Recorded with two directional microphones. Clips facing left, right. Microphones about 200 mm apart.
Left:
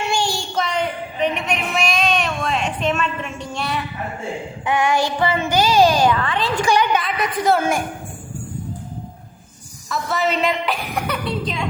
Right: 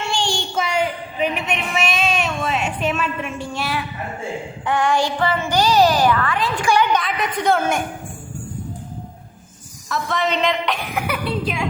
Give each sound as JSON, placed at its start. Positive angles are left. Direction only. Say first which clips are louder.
{"t": 0.1, "sound": "child singing", "louder": "even", "side_deg": 10}
{"t": 0.5, "sound": "a sound", "louder": "right 2 dB", "side_deg": -5}
{"t": 3.5, "sound": "a woman's voice", "louder": "left 2 dB", "side_deg": -5}
{"t": 4.6, "sound": "a sound", "louder": "even", "side_deg": 10}
{"t": 5.8, "sound": "a child's voice", "louder": "left 1 dB", "side_deg": 20}
{"t": 6.9, "sound": "a woman's voice", "louder": "even", "side_deg": 0}
{"t": 9.9, "sound": "a woman's voice", "louder": "even", "side_deg": 5}
{"t": 11.0, "sound": "speech", "louder": "right 1 dB", "side_deg": -10}